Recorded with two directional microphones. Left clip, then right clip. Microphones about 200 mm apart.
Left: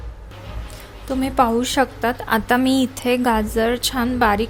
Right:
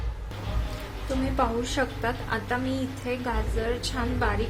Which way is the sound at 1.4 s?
45° left (ahead or behind).